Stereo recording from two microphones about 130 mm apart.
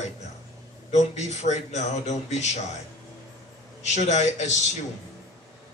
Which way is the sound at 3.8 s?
60° left (ahead or behind).